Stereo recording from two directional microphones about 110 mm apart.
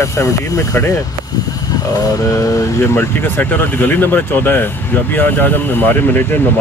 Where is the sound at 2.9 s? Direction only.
15° left (ahead or behind).